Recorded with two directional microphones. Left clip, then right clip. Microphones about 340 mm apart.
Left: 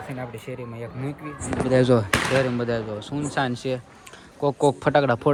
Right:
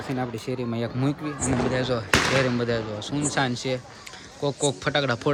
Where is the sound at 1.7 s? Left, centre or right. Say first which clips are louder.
Left 7 dB; centre.